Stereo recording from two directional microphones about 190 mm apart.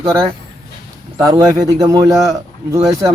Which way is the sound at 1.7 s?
15° right (ahead or behind).